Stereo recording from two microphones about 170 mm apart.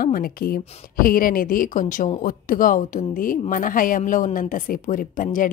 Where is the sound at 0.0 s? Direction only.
55° left (ahead or behind).